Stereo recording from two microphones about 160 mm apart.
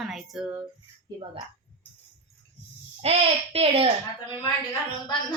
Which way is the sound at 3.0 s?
40° right (ahead or behind).